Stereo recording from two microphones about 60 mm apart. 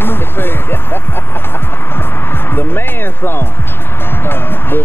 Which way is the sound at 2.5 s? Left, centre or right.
Left.